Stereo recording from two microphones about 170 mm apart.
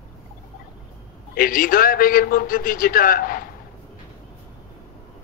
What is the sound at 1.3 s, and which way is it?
A man's voice, 55° left (ahead or behind).